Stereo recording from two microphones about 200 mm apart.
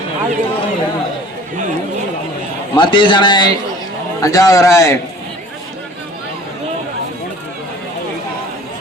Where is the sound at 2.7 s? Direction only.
25° left (ahead or behind).